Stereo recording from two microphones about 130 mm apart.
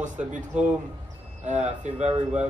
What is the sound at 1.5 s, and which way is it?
Speech, 65° right (ahead or behind).